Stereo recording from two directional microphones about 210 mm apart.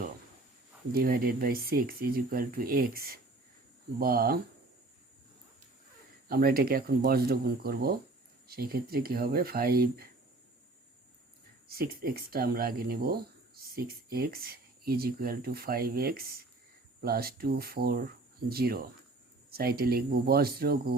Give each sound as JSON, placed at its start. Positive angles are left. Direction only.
{"t": 0.9, "sound": "speech", "side_deg": -45}
{"t": 6.2, "sound": "speech", "side_deg": -45}
{"t": 11.7, "sound": "speech", "side_deg": -45}